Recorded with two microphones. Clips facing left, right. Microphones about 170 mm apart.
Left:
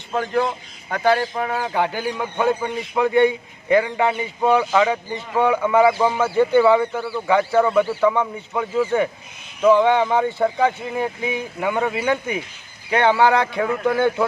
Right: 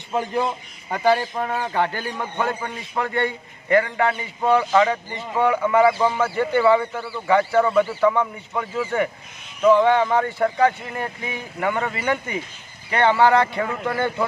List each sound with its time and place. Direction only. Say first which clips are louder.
0.1 s a man's voice: left 2 dB; 15° right (ahead or behind); by 10.4 s 20° left (ahead or behind)
10.4 s a man's voice: even; 5° left (ahead or behind)